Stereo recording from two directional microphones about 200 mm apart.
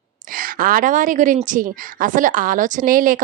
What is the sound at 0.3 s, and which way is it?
A woman's voice, 45° right (ahead or behind).